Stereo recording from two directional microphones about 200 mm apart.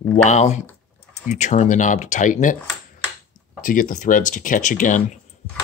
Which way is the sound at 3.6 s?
40° left (ahead or behind).